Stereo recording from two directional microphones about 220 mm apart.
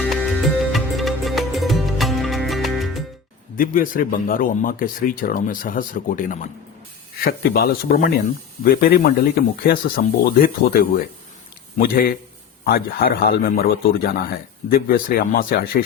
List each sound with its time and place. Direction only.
0.0 s music: centre (ahead or behind)
3.6 s a man's voice: 40° left (ahead or behind)